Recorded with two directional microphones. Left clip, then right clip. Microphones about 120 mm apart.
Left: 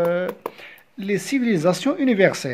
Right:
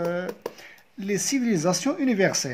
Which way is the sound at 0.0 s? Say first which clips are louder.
Left 7 dB; 20° left (ahead or behind).